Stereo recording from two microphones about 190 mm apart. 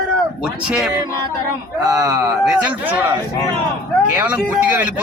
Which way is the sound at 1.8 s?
20° right (ahead or behind).